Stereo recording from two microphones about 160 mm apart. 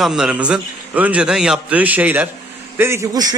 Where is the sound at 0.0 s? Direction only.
5° right (ahead or behind).